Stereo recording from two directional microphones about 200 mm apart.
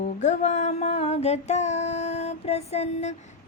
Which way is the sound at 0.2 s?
35° left (ahead or behind).